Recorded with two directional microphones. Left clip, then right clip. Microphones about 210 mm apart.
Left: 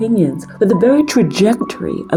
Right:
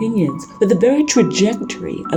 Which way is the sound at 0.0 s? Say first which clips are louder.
Left 4 dB; 15° left (ahead or behind).